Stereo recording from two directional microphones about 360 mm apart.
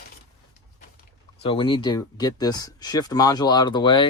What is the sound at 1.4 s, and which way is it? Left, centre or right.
Speech, centre.